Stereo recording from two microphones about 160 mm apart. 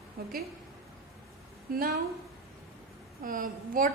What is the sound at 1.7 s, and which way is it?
Speech, 70° right (ahead or behind).